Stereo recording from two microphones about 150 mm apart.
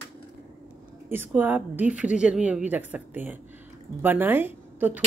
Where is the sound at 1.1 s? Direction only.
10° right (ahead or behind).